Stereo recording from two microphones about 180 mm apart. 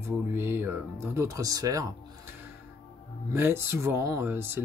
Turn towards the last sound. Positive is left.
turn(degrees=-15)  # may be behind; listen again after turning